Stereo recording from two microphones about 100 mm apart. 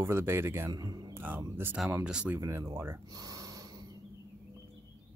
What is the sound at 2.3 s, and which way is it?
Speech, 30° right (ahead or behind).